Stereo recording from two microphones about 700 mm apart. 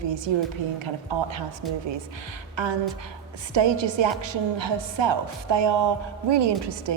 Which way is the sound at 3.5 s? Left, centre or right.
Right.